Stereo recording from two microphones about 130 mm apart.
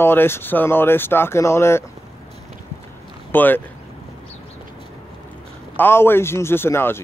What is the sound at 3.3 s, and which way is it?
Speech, 15° left (ahead or behind).